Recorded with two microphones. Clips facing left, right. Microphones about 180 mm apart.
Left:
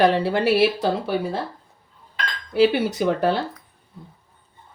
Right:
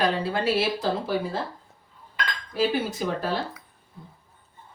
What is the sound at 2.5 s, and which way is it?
Speech, 70° left (ahead or behind).